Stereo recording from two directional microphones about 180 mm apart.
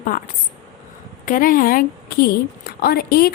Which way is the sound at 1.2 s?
50° left (ahead or behind).